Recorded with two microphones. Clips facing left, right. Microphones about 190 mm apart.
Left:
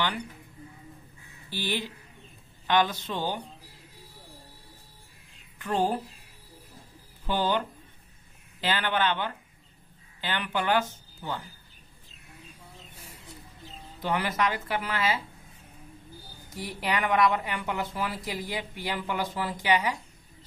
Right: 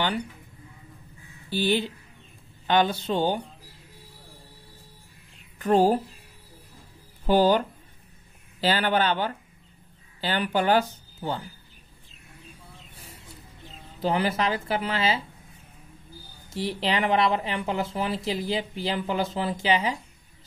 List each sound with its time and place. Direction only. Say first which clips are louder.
1.5 s a man's voice: right 8 dB; 30° right (ahead or behind)
5.6 s a man's voice: right 7 dB; 40° right (ahead or behind)
7.2 s a man's voice: right 7 dB; 40° right (ahead or behind)
14.0 s speech: right 3 dB; 30° right (ahead or behind)
16.4 s speech: right 5 dB; 30° right (ahead or behind)